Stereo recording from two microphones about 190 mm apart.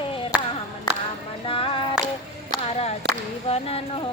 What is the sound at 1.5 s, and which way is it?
Music, 30° left (ahead or behind).